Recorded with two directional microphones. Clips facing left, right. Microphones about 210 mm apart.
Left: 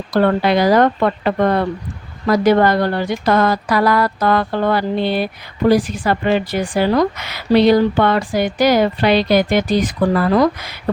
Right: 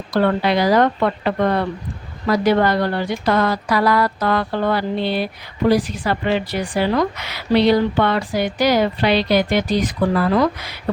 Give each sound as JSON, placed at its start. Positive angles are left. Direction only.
{"t": 0.1, "sound": "a woman's voice", "side_deg": 50}